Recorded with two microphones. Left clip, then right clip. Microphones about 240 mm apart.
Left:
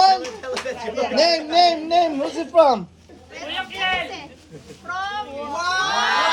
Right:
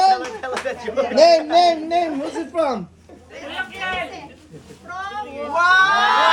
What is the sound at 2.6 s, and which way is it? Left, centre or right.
Speech, centre.